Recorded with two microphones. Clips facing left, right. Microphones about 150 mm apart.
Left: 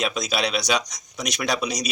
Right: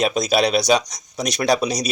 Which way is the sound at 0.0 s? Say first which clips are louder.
Right 7 dB; 40° right (ahead or behind).